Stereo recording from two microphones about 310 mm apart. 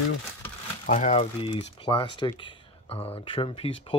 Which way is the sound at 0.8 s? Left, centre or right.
Left.